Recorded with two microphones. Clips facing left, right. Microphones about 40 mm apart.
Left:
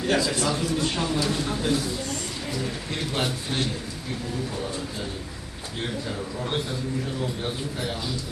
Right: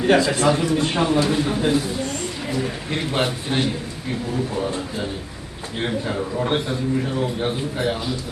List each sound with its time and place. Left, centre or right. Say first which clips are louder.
0.2 s a man's voice: right 7 dB; right